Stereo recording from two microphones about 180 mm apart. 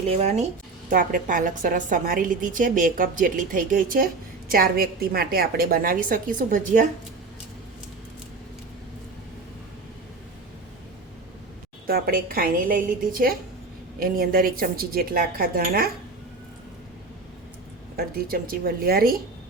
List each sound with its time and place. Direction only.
0.0 s speech: 35° right (ahead or behind)
11.9 s speech: 55° right (ahead or behind)
17.9 s speech: 55° right (ahead or behind)